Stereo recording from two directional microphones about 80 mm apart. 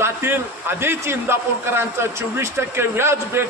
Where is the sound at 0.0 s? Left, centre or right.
Right.